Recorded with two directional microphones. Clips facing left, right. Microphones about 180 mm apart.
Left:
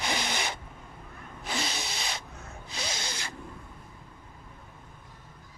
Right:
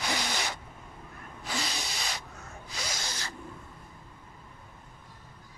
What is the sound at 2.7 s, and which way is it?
Owl, 25° left (ahead or behind).